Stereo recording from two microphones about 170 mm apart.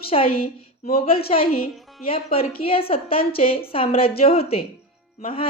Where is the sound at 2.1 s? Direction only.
35° left (ahead or behind).